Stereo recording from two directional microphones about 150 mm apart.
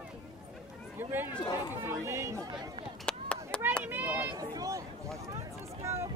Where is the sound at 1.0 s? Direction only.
15° right (ahead or behind).